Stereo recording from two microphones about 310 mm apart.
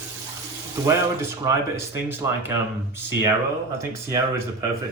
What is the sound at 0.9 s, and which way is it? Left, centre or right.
Speech, centre.